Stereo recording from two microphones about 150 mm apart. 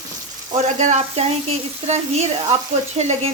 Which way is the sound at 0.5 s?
55° right (ahead or behind).